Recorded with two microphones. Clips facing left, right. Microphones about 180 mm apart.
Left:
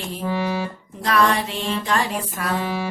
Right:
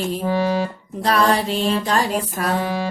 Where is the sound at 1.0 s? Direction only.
35° right (ahead or behind).